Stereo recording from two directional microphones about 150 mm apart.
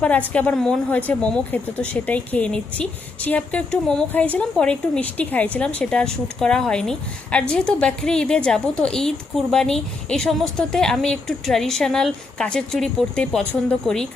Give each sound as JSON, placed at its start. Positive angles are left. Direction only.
{"t": 0.3, "sound": "speech", "side_deg": 5}